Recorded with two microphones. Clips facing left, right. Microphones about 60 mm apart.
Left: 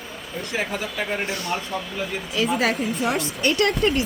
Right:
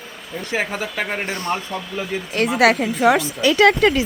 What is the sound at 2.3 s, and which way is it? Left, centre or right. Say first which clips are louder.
Speech: right 6 dB; right.